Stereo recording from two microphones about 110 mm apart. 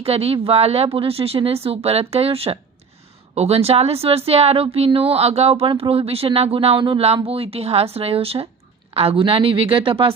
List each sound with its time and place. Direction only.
0.0 s speech: 60° right (ahead or behind)